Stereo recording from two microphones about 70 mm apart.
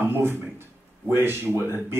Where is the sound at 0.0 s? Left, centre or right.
Right.